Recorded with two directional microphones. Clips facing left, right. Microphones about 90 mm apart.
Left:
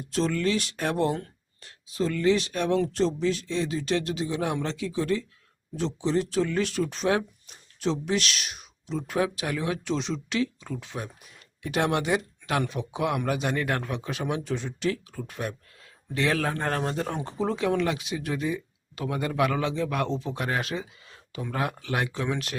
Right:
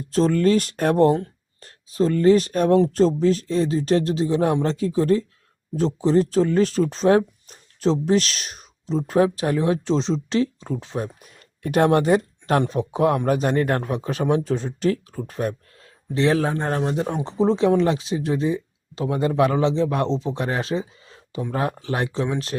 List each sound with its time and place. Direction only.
0.1 s speech: 40° right (ahead or behind)
16.1 s speech: 25° right (ahead or behind)